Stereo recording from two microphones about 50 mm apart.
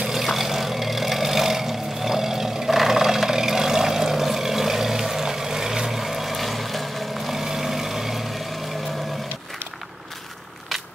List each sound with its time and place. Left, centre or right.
0.0 s vehicle: centre